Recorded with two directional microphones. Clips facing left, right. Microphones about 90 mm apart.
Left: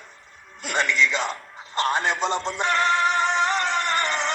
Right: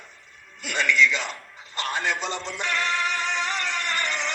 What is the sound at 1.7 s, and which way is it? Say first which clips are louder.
Music: left 4 dB; 35° left (ahead or behind).